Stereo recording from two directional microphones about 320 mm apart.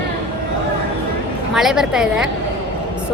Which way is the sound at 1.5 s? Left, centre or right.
Centre.